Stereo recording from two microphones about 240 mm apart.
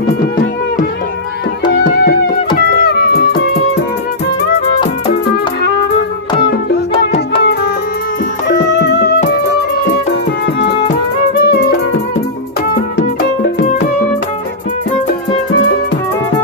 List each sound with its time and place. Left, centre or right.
1.7 s music: left
8.7 s music: left
11.3 s music: left
12.9 s music: left